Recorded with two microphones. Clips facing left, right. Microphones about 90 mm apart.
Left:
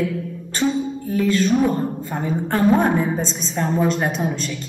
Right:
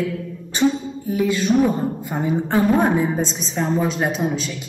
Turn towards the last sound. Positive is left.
turn(degrees=0)  # may be behind; listen again after turning